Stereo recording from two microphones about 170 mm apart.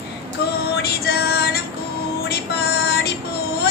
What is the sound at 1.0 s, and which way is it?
Music, 70° left (ahead or behind).